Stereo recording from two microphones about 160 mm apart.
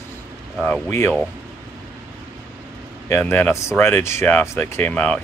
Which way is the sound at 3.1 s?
15° left (ahead or behind).